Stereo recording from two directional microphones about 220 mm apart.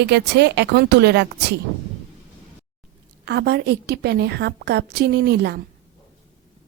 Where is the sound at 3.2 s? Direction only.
50° right (ahead or behind).